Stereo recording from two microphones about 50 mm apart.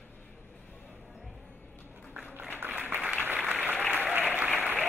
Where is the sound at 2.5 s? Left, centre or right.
Right.